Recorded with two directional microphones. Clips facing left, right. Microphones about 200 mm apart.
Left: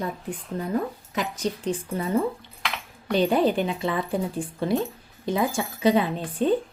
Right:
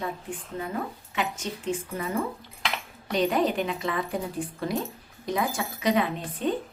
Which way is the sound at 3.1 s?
30° left (ahead or behind).